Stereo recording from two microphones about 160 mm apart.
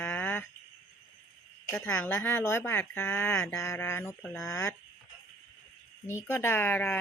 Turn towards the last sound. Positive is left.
turn(degrees=15)  # may be behind; listen again after turning